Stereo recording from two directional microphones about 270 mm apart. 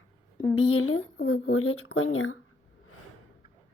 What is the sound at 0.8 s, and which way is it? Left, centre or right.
Speech, left.